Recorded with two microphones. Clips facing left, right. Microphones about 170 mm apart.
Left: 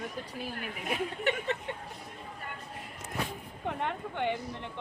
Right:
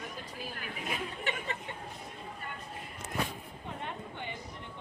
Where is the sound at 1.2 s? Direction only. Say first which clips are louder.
Left 6 dB; 65° left (ahead or behind).